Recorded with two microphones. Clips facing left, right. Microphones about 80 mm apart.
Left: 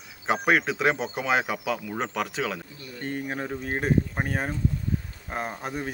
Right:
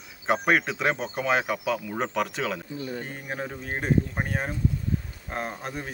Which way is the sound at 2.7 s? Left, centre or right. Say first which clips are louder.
Right 9 dB; right.